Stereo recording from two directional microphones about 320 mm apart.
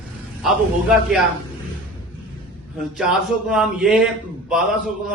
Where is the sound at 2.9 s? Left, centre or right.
Centre.